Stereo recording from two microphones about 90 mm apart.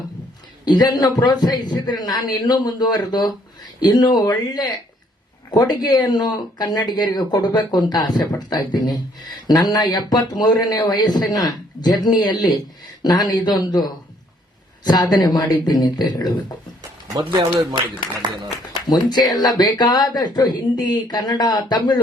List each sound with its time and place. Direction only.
0.6 s speech: 50° left (ahead or behind)
15.1 s speech: 50° left (ahead or behind)
16.8 s a sound: 45° right (ahead or behind)
17.3 s a man's voice: 55° right (ahead or behind)
18.7 s speech: 55° left (ahead or behind)